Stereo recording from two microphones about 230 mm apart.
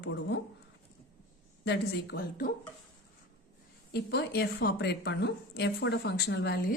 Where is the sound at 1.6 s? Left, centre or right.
Left.